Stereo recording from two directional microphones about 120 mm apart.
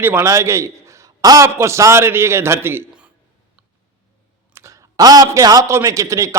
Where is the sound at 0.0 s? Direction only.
20° right (ahead or behind).